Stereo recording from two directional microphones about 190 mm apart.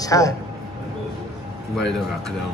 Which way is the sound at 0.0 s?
15° left (ahead or behind).